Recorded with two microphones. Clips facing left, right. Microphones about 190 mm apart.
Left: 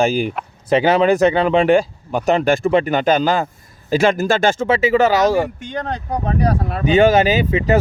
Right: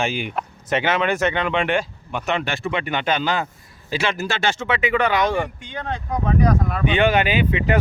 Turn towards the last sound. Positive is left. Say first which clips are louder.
# left 4 dB
turn(degrees=40)  # may be behind; listen again after turning